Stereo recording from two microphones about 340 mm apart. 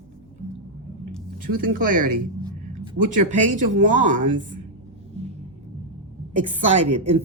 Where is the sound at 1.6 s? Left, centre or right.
Right.